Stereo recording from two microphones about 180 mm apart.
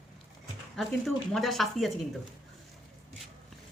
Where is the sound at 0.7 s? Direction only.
Centre (ahead or behind).